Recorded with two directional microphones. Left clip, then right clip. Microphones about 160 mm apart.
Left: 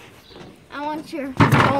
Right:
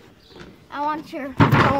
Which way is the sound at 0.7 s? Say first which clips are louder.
Right 3 dB; 10° right (ahead or behind).